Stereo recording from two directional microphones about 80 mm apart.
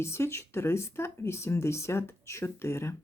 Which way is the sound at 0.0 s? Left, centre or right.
Left.